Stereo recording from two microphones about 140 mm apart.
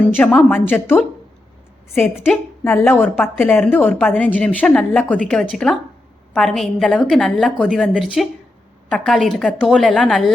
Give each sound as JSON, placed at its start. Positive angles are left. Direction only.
{"t": 0.0, "sound": "a woman's voice", "side_deg": 10}
{"t": 2.1, "sound": "a woman's voice", "side_deg": -5}
{"t": 2.6, "sound": "a woman's voice", "side_deg": 15}